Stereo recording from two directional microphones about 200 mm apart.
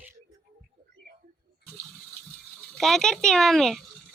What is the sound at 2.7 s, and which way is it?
Speech, centre (ahead or behind).